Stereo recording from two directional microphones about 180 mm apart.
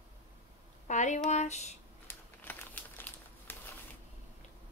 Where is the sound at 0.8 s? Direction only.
40° left (ahead or behind).